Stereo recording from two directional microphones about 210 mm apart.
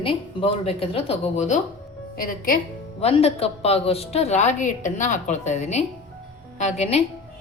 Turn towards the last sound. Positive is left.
turn(degrees=30)  # may be behind; listen again after turning